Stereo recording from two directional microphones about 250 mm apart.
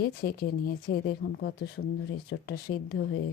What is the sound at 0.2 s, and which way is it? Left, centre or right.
Speech, left.